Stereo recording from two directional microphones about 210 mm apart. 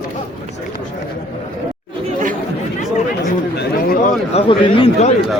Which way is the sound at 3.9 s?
35° left (ahead or behind).